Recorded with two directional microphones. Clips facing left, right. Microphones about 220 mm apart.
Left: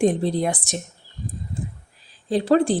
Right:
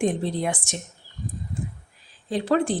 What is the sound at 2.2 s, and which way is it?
Speech, 35° left (ahead or behind).